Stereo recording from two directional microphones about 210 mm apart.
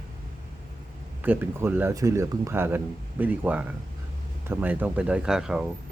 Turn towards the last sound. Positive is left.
turn(degrees=-5)  # may be behind; listen again after turning